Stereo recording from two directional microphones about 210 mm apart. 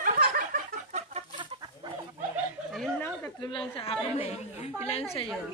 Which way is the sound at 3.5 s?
25° left (ahead or behind).